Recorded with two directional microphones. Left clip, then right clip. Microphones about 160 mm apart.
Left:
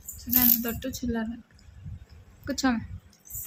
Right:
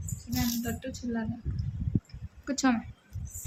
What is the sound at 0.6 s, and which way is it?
Speech, 25° left (ahead or behind).